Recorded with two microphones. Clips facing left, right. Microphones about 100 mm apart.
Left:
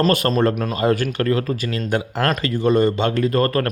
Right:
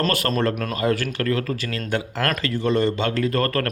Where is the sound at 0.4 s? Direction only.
20° left (ahead or behind).